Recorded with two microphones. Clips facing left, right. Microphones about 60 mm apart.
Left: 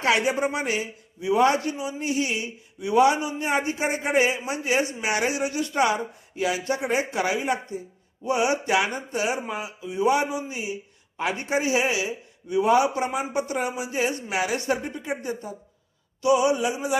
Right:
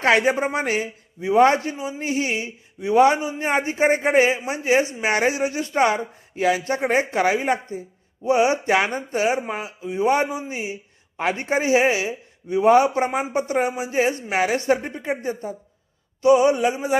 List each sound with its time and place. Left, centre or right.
0.0 s a man's voice: right